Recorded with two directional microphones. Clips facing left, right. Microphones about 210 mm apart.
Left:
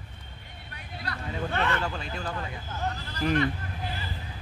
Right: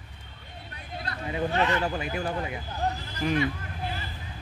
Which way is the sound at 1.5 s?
60° left (ahead or behind).